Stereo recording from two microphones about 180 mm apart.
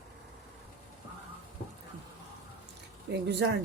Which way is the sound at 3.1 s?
70° right (ahead or behind).